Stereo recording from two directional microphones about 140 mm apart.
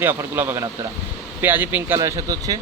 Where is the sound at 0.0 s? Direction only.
15° right (ahead or behind).